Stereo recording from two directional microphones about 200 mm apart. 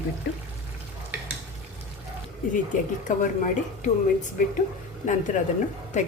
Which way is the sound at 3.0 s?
40° left (ahead or behind).